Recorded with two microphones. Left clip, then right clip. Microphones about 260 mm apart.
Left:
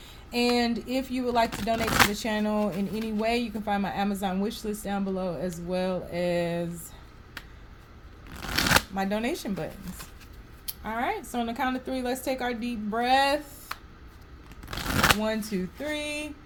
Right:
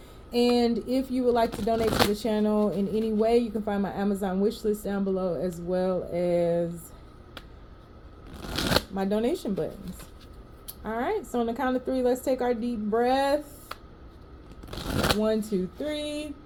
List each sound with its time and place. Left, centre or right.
0.3 s speech: left
8.3 s shuffling cards: centre
9.0 s speech: left
10.8 s a woman's voice: left
14.7 s shuffling cards: centre
15.8 s a woman's voice: left